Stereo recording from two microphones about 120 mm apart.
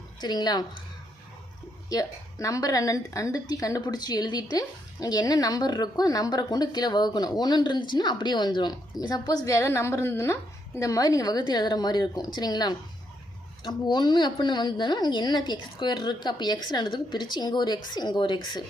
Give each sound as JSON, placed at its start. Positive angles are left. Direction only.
{"t": 0.2, "sound": "a woman's voice", "side_deg": 35}
{"t": 1.9, "sound": "a woman's voice", "side_deg": 30}